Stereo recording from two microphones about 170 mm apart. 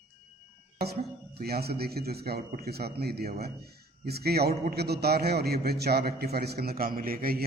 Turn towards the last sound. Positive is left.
turn(degrees=-60)  # may be behind; listen again after turning